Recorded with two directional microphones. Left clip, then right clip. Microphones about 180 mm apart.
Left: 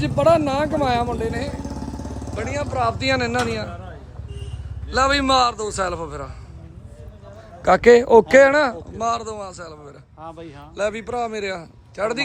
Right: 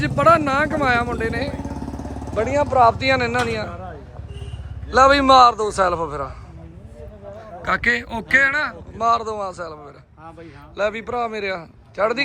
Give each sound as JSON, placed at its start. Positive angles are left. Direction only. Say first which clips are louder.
{"t": 0.0, "sound": "a man's voice", "louder": "right 1 dB", "side_deg": 0}
{"t": 1.3, "sound": "a man's voice", "louder": "right 2 dB", "side_deg": 15}
{"t": 2.3, "sound": "a man's voice", "louder": "right 8 dB", "side_deg": 0}
{"t": 4.9, "sound": "a man's voice", "louder": "right 5 dB", "side_deg": 5}
{"t": 7.6, "sound": "a man's voice", "louder": "left 7 dB", "side_deg": 35}
{"t": 9.0, "sound": "a man's voice", "louder": "right 6 dB", "side_deg": 10}